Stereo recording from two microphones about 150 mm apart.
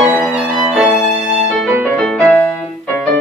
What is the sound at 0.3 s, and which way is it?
Music, 5° right (ahead or behind).